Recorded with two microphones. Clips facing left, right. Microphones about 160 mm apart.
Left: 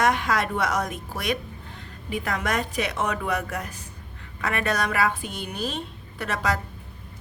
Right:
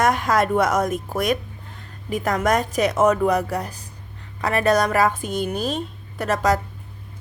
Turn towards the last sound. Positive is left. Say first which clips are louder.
# right 7 dB
turn(degrees=-45)  # may be behind; listen again after turning